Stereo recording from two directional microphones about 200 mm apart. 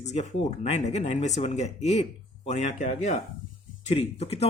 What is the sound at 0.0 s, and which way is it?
Speech, 35° left (ahead or behind).